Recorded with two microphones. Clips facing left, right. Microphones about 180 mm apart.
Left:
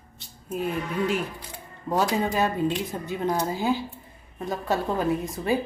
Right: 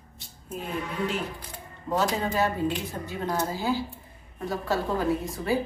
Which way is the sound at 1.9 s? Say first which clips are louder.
Left 2 dB; 15° left (ahead or behind).